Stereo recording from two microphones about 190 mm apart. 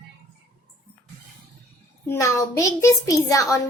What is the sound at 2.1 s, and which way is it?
A child's voice, 15° left (ahead or behind).